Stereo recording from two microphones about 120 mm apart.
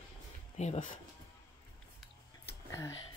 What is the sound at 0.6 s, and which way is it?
Speech, 80° left.